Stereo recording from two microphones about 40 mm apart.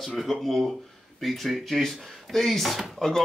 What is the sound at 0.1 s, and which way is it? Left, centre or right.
Speech, centre.